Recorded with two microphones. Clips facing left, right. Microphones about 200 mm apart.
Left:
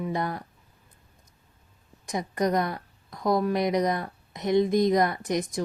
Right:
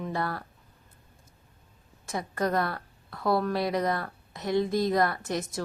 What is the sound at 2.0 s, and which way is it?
Speech, 15° left (ahead or behind).